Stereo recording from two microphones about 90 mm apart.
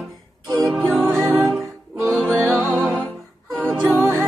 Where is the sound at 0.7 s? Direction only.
20° right (ahead or behind).